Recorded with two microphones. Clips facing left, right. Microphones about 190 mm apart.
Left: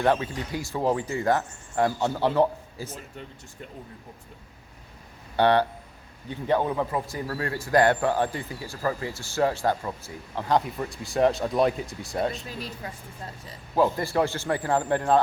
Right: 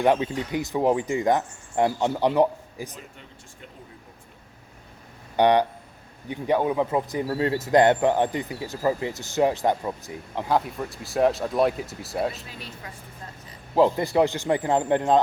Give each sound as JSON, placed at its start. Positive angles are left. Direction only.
{"t": 0.0, "sound": "speech", "side_deg": -15}
{"t": 5.4, "sound": "speech", "side_deg": -15}
{"t": 10.5, "sound": "speech", "side_deg": 0}
{"t": 12.5, "sound": "speech", "side_deg": 40}
{"t": 13.7, "sound": "speech", "side_deg": -20}